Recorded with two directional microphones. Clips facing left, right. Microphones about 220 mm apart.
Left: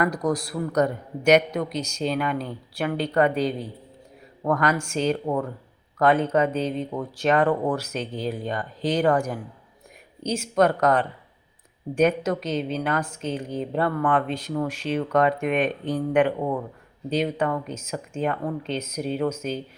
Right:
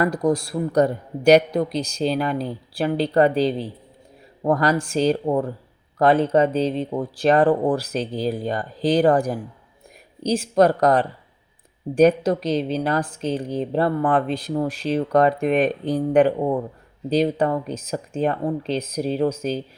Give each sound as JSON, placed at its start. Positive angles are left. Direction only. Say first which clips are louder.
{"t": 0.0, "sound": "a woman's voice", "louder": "right 4 dB", "side_deg": -30}